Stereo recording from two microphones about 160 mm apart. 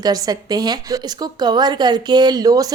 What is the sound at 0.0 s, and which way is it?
A woman's voice, 25° right (ahead or behind).